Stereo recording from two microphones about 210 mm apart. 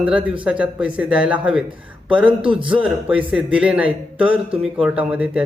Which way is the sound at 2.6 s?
5° right (ahead or behind).